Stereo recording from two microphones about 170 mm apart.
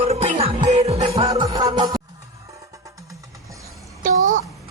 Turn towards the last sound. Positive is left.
turn(degrees=-50)  # may be behind; listen again after turning